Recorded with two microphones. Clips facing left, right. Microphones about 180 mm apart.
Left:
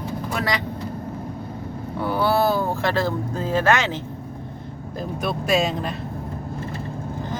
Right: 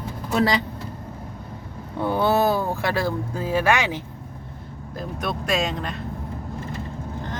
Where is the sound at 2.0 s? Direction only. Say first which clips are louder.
Even; 20° right (ahead or behind).